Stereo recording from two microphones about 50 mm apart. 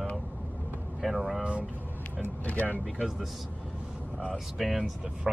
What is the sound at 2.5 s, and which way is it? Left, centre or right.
Speech, left.